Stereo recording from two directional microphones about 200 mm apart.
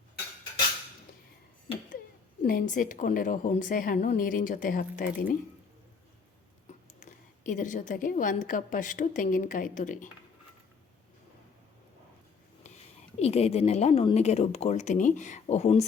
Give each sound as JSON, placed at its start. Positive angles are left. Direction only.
{"t": 2.4, "sound": "a woman's voice", "side_deg": 45}
{"t": 7.0, "sound": "a woman's voice", "side_deg": 40}
{"t": 12.7, "sound": "a sound", "side_deg": 35}
{"t": 13.1, "sound": "a woman's voice", "side_deg": 30}